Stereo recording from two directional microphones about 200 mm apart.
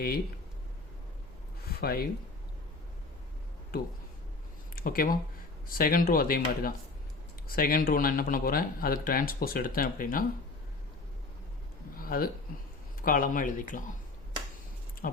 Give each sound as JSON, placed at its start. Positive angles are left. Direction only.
{"t": 1.7, "sound": "speech", "side_deg": 50}
{"t": 4.7, "sound": "speech", "side_deg": 45}
{"t": 11.9, "sound": "a sound", "side_deg": 45}
{"t": 13.0, "sound": "speech", "side_deg": 45}
{"t": 15.0, "sound": "speech", "side_deg": 40}